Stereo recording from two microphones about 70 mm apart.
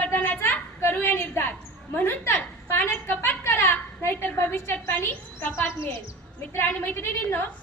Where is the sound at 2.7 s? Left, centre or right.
Left.